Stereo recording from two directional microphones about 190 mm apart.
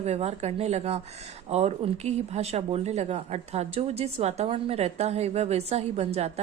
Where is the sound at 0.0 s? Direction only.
35° right (ahead or behind).